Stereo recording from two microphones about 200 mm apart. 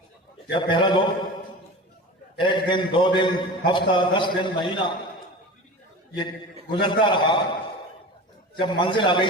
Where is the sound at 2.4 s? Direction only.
25° left (ahead or behind).